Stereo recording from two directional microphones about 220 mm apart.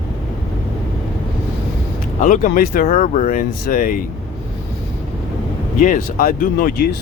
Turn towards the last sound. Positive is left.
turn(degrees=40)  # may be behind; listen again after turning